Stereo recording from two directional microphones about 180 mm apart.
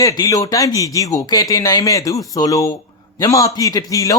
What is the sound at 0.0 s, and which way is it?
Speech, 20° left (ahead or behind).